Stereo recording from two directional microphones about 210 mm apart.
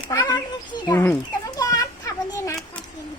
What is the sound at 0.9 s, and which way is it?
Speech, 10° left (ahead or behind).